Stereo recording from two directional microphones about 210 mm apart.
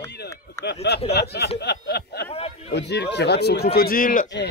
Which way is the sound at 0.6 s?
10° left (ahead or behind).